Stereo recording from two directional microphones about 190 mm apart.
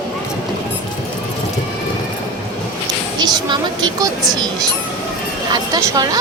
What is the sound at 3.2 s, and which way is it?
Speech, 25° right (ahead or behind).